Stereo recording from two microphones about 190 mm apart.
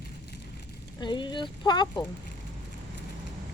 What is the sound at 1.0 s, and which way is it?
Speech, 25° left (ahead or behind).